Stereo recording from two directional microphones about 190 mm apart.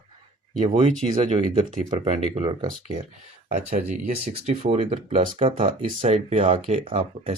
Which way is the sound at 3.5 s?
40° right (ahead or behind).